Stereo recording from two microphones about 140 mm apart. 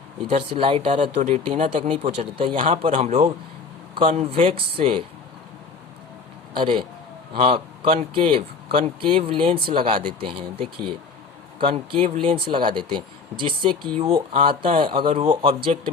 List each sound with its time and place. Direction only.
0.3 s speech: 45° right (ahead or behind)
2.1 s a man's voice: 40° right (ahead or behind)
6.6 s a man's voice: 35° right (ahead or behind)